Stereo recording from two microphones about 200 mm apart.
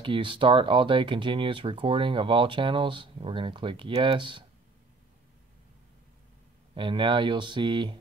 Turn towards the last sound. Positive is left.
turn(degrees=-25)  # may be behind; listen again after turning